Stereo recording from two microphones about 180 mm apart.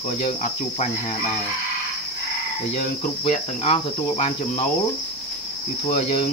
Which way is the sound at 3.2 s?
35° left (ahead or behind).